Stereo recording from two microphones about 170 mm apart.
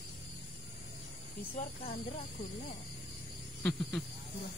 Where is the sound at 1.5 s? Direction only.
35° left (ahead or behind).